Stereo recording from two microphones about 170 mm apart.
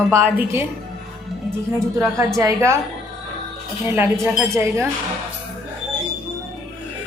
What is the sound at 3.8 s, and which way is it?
Music, 15° right (ahead or behind).